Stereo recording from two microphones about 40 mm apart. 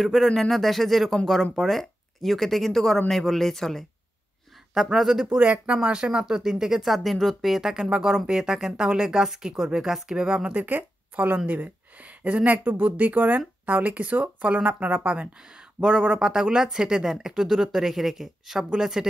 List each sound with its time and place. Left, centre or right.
0.0 s speech: centre
4.9 s speech: centre
5.4 s speech: right
5.9 s speech: right; by 7.7 s centre
8.3 s speech: centre
10.5 s speech: right
15.9 s speech: centre